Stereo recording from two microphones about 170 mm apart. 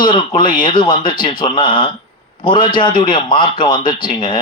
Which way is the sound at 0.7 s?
25° left (ahead or behind).